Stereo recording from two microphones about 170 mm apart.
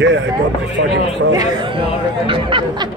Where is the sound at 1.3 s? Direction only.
25° right (ahead or behind).